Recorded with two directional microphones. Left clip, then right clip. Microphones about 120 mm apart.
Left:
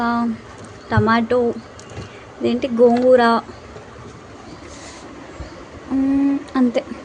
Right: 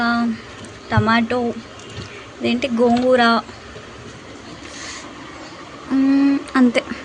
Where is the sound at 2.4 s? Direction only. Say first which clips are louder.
Left 3 dB; 20° left (ahead or behind).